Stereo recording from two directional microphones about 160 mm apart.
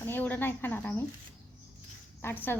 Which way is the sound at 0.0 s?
10° left (ahead or behind).